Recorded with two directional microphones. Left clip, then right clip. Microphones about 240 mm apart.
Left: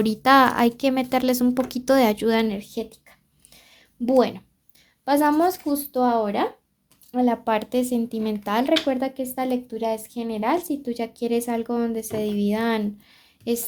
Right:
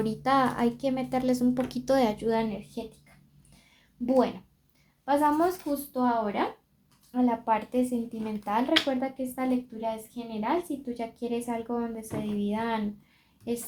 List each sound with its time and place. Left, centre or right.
0.0 s speech: left
4.0 s a woman's voice: left